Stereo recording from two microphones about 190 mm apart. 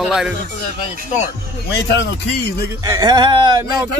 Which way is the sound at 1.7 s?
70° left (ahead or behind).